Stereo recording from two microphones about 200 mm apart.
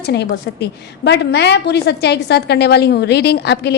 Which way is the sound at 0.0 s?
55° left (ahead or behind).